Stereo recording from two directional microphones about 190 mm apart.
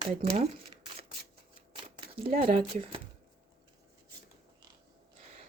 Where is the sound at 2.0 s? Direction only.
30° right (ahead or behind).